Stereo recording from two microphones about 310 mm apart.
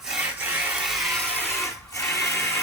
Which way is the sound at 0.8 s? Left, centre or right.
Centre.